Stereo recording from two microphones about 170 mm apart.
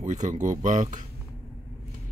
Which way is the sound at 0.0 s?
45° right (ahead or behind).